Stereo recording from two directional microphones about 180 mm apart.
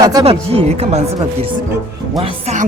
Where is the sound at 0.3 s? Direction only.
35° right (ahead or behind).